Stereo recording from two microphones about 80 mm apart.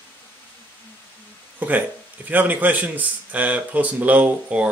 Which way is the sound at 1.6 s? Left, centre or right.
Right.